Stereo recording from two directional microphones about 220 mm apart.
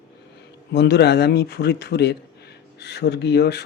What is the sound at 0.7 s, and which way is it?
Speech, 50° left (ahead or behind).